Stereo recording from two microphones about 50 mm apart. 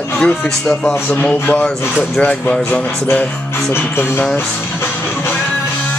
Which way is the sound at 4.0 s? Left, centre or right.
Left.